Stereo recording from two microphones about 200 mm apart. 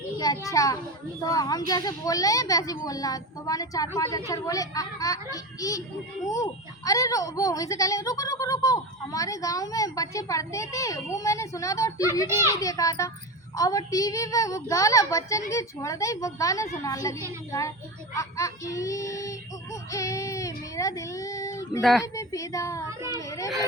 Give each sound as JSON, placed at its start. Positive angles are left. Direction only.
{"t": 0.2, "sound": "a sound", "side_deg": 20}
{"t": 1.2, "sound": "a child's voice", "side_deg": 20}
{"t": 21.8, "sound": "speech", "side_deg": 0}
{"t": 22.0, "sound": "a child's voice", "side_deg": 15}